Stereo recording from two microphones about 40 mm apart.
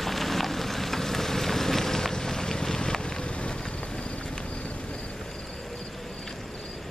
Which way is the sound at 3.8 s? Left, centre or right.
Centre.